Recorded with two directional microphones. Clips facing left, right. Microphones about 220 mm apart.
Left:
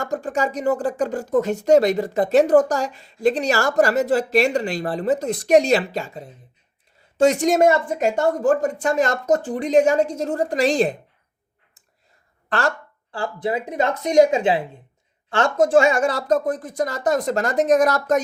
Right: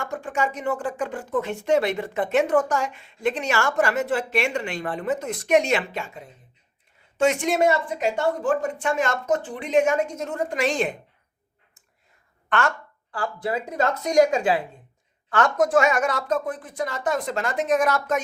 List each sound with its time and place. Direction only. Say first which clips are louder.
0.0 s speech: left 4 dB; 40° left (ahead or behind)
12.5 s speech: left 2 dB; 35° left (ahead or behind)